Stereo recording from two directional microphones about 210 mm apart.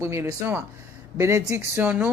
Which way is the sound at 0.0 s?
15° right (ahead or behind).